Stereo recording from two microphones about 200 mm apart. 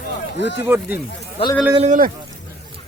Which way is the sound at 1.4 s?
30° left (ahead or behind).